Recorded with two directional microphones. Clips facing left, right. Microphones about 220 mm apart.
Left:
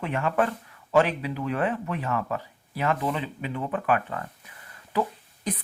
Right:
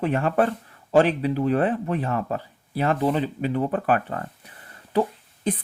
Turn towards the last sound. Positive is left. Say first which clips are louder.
# right 5 dB
turn(degrees=-30)  # may be behind; listen again after turning